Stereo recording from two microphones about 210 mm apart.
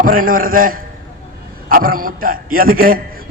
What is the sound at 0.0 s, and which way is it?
A man's voice, 40° right (ahead or behind).